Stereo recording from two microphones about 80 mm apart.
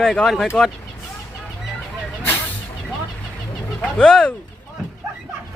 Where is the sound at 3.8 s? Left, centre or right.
Centre.